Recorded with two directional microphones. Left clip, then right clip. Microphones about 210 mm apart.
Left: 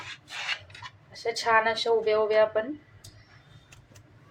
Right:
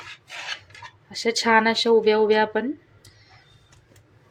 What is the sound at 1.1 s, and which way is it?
A woman's voice, 50° right (ahead or behind).